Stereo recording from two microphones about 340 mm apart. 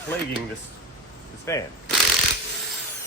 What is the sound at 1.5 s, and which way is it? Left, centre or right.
Speech, centre.